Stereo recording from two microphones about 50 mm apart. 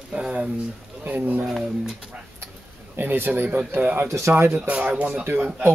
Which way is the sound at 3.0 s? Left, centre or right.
Right.